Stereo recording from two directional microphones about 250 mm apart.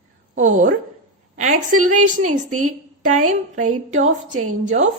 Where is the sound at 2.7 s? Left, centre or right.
Right.